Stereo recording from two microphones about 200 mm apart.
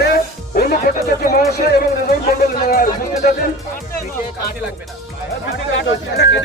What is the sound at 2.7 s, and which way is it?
Speech, 45° left (ahead or behind).